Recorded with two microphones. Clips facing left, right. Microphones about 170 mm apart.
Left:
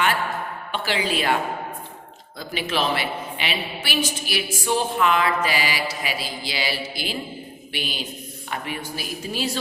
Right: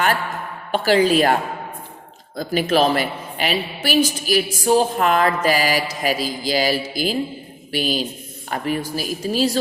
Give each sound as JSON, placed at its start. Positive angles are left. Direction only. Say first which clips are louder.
{"t": 0.7, "sound": "a woman's voice", "louder": "right 10 dB", "side_deg": -40}